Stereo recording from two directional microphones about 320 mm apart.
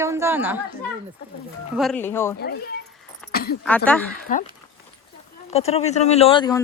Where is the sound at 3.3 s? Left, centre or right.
Left.